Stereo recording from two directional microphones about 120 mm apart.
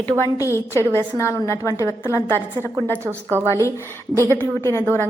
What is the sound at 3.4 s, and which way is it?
A woman's voice, 25° left (ahead or behind).